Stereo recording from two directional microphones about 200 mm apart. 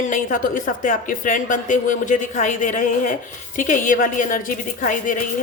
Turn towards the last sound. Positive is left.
turn(degrees=40)  # may be behind; listen again after turning